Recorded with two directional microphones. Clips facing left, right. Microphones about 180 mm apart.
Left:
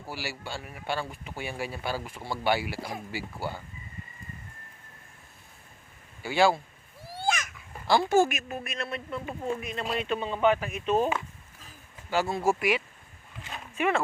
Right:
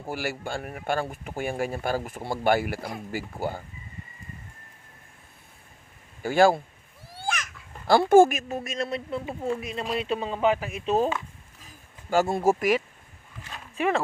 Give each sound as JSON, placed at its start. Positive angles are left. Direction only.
{"t": 0.1, "sound": "speech", "side_deg": -50}
{"t": 6.2, "sound": "speech", "side_deg": -45}
{"t": 7.9, "sound": "speech", "side_deg": -50}
{"t": 8.3, "sound": "speech", "side_deg": -35}
{"t": 12.1, "sound": "speech", "side_deg": -45}